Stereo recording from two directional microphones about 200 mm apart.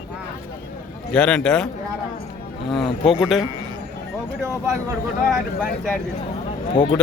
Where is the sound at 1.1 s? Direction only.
5° left (ahead or behind).